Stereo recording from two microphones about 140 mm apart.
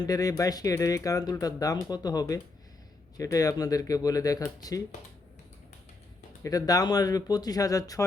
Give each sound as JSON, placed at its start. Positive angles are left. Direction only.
{"t": 0.0, "sound": "speech", "side_deg": 25}
{"t": 6.4, "sound": "speech", "side_deg": 25}